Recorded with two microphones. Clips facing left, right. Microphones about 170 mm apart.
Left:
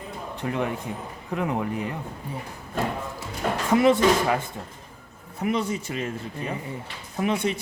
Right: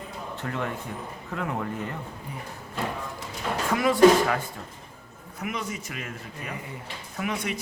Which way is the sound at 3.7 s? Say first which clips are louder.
Left 6 dB; 20° left (ahead or behind).